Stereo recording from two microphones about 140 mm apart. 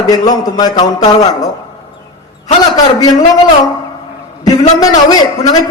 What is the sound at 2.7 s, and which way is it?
Speech, 25° left (ahead or behind).